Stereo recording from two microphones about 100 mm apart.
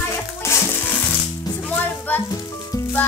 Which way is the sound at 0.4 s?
25° left (ahead or behind).